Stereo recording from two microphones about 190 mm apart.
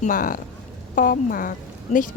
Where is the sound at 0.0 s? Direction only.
45° left (ahead or behind).